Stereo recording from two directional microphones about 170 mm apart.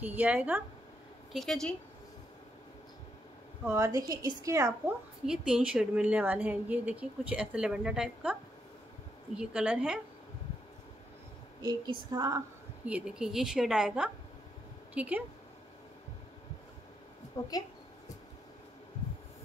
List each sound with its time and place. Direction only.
0.0 s a woman's voice: 10° right (ahead or behind)
1.3 s a woman's voice: centre (ahead or behind)
3.6 s a woman's voice: 15° right (ahead or behind)
5.2 s a woman's voice: 5° right (ahead or behind)
11.6 s a woman's voice: 25° right (ahead or behind)
12.8 s a woman's voice: 5° right (ahead or behind)
17.4 s a woman's voice: 15° left (ahead or behind)